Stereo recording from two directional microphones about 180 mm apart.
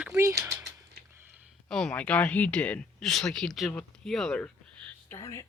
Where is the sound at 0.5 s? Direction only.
65° right (ahead or behind).